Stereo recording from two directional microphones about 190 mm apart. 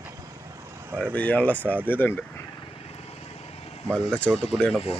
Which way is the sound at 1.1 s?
5° left (ahead or behind).